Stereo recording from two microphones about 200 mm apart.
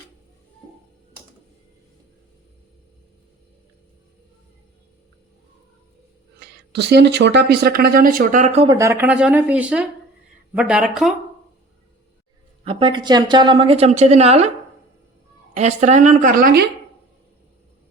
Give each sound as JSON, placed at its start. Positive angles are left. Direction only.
{"t": 6.7, "sound": "speech", "side_deg": -60}
{"t": 12.6, "sound": "a woman's voice", "side_deg": -25}
{"t": 15.5, "sound": "speech", "side_deg": -35}